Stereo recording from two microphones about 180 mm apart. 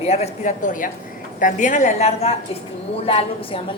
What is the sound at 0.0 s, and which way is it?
A woman's voice, 35° left (ahead or behind).